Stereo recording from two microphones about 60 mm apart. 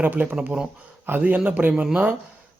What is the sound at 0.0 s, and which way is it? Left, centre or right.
Speech, right.